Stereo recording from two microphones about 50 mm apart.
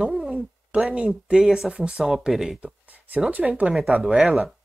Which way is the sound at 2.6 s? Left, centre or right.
Right.